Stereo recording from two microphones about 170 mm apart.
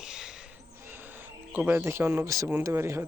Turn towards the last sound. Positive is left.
turn(degrees=-15)  # may be behind; listen again after turning